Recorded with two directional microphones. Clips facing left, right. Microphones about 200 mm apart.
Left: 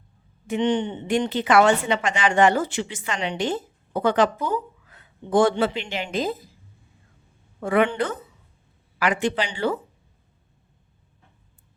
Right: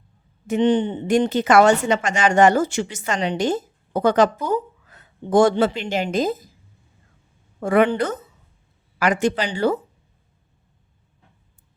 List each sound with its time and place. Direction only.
0.4 s a woman's voice: 40° right (ahead or behind)
7.6 s a woman's voice: 40° right (ahead or behind)